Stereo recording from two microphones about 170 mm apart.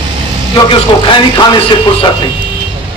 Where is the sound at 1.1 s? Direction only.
25° left (ahead or behind).